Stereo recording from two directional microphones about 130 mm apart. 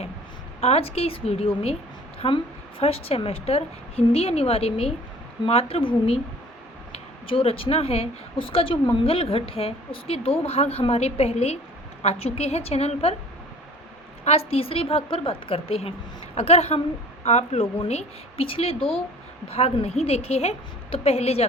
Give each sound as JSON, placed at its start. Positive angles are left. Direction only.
{"t": 0.6, "sound": "speech", "side_deg": 50}
{"t": 6.9, "sound": "speech", "side_deg": 45}
{"t": 14.3, "sound": "speech", "side_deg": 50}